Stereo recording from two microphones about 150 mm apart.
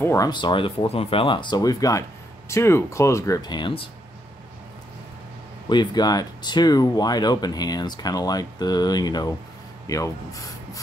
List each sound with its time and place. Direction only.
0.0 s speech: 20° left (ahead or behind)
0.3 s speech: 30° left (ahead or behind)
5.7 s speech: 30° left (ahead or behind)